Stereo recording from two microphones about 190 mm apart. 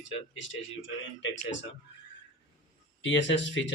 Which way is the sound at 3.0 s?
75° left (ahead or behind).